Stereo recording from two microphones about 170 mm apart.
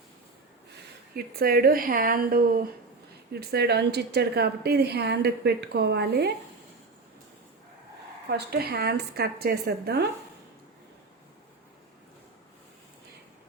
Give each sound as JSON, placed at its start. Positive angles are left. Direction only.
{"t": 1.1, "sound": "a woman's voice", "side_deg": -65}
{"t": 3.5, "sound": "a woman's voice", "side_deg": -70}
{"t": 8.3, "sound": "a woman's voice", "side_deg": -65}